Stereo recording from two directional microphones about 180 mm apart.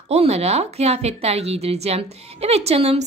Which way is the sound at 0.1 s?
35° right (ahead or behind).